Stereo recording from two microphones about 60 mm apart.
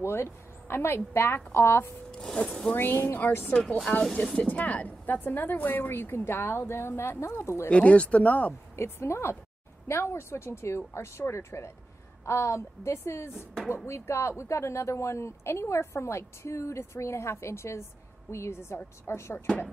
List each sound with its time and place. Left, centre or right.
0.0 s speech: left
2.0 s speech: centre
2.7 s speech: left
3.6 s speech: centre
4.4 s a woman's voice: left
7.7 s speech: centre
8.7 s a woman's voice: left